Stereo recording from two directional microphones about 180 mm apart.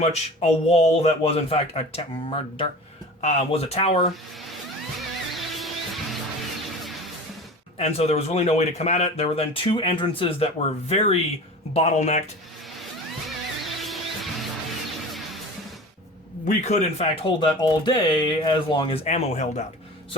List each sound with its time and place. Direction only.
0.0 s speech: 35° left (ahead or behind)
5.3 s music: centre (ahead or behind)
7.8 s speech: 35° left (ahead or behind)
13.2 s music: centre (ahead or behind)
16.5 s speech: 40° left (ahead or behind)
19.0 s speech: 40° left (ahead or behind)